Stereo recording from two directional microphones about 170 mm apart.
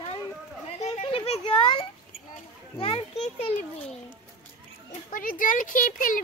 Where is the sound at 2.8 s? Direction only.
35° left (ahead or behind).